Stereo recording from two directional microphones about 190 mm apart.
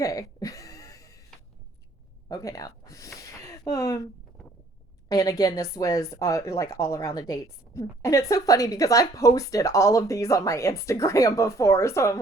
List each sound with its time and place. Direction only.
0.0 s a sound: 20° left (ahead or behind)
2.3 s speech: 15° left (ahead or behind)
5.0 s a woman's voice: 20° left (ahead or behind)